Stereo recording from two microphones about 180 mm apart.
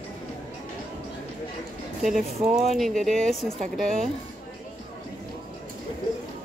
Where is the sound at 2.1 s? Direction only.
35° right (ahead or behind).